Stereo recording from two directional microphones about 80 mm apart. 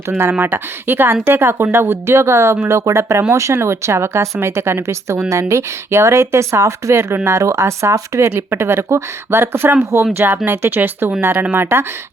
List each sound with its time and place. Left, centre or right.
0.2 s speech: right